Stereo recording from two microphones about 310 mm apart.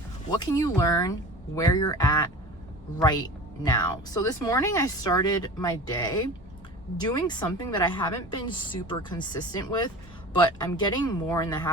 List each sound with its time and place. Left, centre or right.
0.3 s speech: centre